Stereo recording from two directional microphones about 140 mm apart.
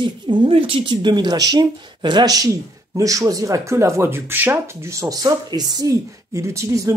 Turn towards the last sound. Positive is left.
turn(degrees=-20)  # may be behind; listen again after turning